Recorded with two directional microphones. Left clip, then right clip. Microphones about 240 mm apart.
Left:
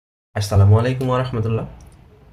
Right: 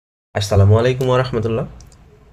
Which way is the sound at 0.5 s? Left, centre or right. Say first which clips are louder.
Right 5 dB; right.